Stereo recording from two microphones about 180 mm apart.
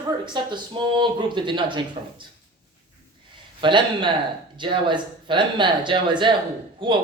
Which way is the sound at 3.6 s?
25° right (ahead or behind).